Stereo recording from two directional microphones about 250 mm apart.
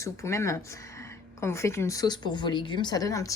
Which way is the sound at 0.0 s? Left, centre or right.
Centre.